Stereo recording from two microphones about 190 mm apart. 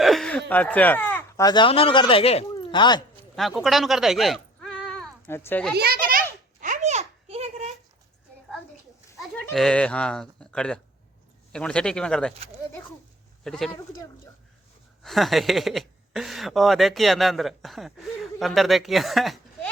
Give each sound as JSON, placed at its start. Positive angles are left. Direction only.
{"t": 0.0, "sound": "a sound", "side_deg": 0}
{"t": 1.5, "sound": "speech", "side_deg": 25}
{"t": 3.3, "sound": "speech", "side_deg": 0}
{"t": 5.7, "sound": "a sound", "side_deg": -55}
{"t": 9.0, "sound": "goat", "side_deg": 15}
{"t": 9.5, "sound": "speech", "side_deg": 5}
{"t": 13.4, "sound": "speech", "side_deg": 0}
{"t": 15.0, "sound": "speech", "side_deg": 0}